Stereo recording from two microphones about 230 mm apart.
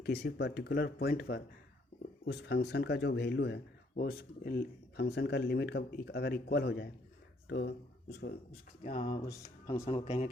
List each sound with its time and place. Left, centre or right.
0.0 s speech: left
8.8 s speech: left
9.2 s speech: centre
9.8 s speech: left